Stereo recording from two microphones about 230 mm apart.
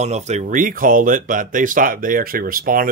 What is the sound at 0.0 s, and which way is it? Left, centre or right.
Speech, right.